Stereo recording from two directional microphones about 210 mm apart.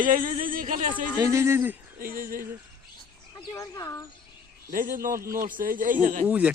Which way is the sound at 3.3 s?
15° left (ahead or behind).